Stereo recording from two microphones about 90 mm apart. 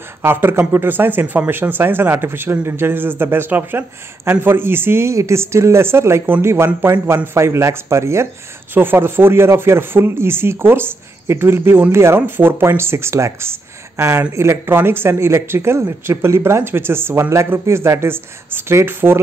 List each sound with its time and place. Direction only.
0.2 s speech: 25° right (ahead or behind)